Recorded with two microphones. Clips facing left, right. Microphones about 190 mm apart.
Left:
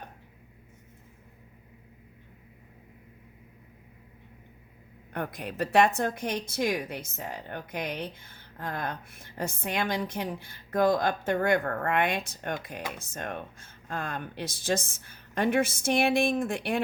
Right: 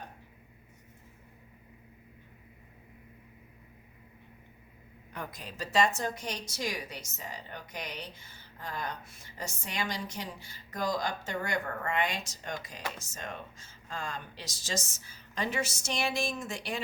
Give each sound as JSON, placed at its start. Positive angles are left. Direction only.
{"t": 5.1, "sound": "a woman's voice", "side_deg": 60}